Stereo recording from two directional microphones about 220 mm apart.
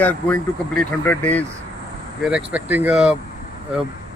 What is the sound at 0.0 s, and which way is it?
Speech, 5° left (ahead or behind).